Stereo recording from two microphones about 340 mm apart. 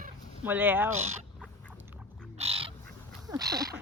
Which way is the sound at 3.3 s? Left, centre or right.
Centre.